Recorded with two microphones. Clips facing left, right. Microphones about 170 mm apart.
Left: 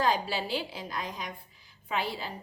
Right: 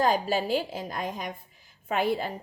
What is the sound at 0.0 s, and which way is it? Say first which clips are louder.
A woman's voice: right 4 dB; 45° right (ahead or behind).